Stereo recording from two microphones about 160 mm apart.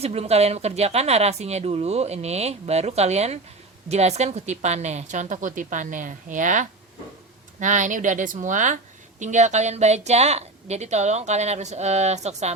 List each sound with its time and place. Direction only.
0.0 s a woman's voice: 40° right (ahead or behind)